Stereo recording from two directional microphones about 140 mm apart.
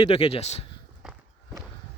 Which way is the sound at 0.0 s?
45° left (ahead or behind).